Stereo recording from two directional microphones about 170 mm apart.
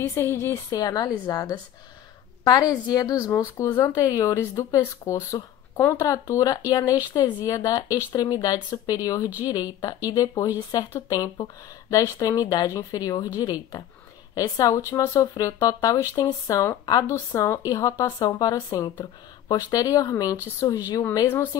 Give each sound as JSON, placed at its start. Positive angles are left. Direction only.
{"t": 0.0, "sound": "a woman's voice", "side_deg": 15}